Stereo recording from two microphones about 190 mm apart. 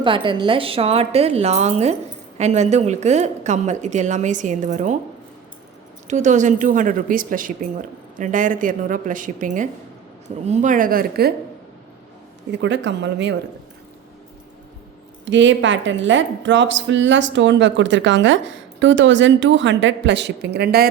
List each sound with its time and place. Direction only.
0.0 s a woman's voice: 25° right (ahead or behind)
6.1 s a woman's voice: 40° right (ahead or behind)
12.5 s a woman's voice: 65° right (ahead or behind)
15.2 s a woman's voice: 75° right (ahead or behind); by 20.8 s 55° right (ahead or behind)